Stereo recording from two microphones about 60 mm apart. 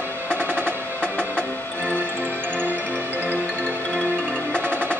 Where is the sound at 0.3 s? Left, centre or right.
Right.